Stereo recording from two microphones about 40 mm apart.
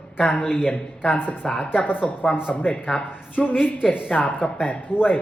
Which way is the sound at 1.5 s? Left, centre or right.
Left.